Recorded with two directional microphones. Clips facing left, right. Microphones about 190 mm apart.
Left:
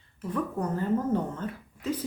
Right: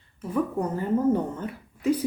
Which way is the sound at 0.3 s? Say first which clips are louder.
Right 4 dB; 15° right (ahead or behind).